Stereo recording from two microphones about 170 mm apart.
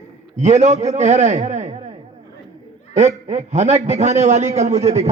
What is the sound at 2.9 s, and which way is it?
A man's voice, 40° right (ahead or behind).